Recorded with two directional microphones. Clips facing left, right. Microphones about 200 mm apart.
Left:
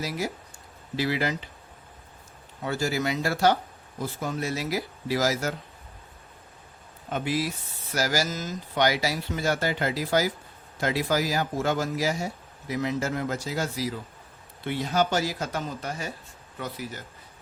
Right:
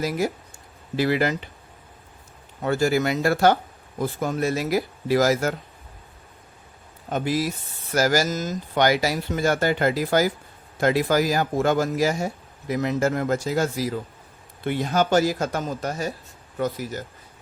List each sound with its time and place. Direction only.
0.9 s speech: 55° right (ahead or behind)
2.6 s speech: 55° right (ahead or behind)
7.1 s speech: 45° right (ahead or behind)